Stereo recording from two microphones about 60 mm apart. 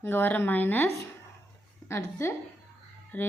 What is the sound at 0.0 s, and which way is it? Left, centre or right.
Speech, left.